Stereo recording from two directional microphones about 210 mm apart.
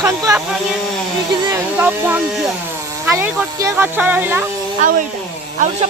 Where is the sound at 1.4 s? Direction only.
10° right (ahead or behind).